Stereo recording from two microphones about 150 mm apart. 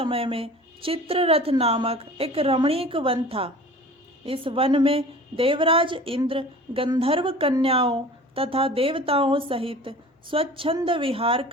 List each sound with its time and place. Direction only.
0.0 s speech: 40° right (ahead or behind)